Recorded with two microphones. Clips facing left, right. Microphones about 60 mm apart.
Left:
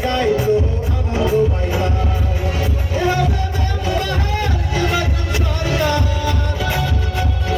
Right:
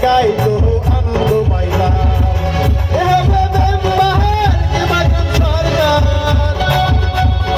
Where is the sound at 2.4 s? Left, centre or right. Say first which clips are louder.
Right 5 dB; right.